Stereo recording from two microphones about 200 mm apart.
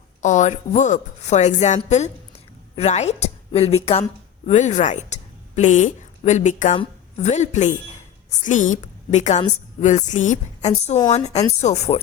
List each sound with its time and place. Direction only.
0.2 s a woman's voice: 35° left (ahead or behind)